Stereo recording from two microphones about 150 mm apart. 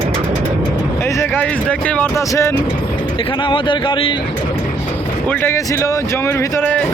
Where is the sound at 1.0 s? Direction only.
15° left (ahead or behind).